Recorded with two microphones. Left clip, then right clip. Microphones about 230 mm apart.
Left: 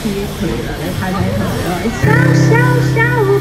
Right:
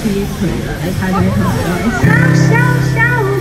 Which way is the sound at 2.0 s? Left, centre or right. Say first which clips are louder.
Left 1 dB; left.